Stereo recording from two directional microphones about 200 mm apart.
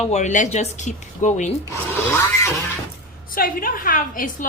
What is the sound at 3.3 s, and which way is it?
A woman's voice, 45° left (ahead or behind).